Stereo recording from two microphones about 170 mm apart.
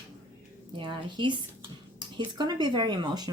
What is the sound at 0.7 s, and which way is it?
Speech, 30° right (ahead or behind).